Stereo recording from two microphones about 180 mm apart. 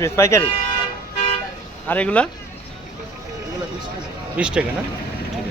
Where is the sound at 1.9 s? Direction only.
5° left (ahead or behind).